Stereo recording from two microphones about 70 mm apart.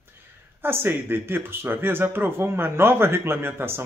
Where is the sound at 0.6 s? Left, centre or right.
Right.